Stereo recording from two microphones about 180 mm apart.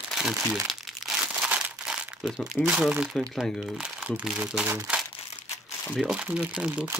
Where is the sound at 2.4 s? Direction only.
5° right (ahead or behind).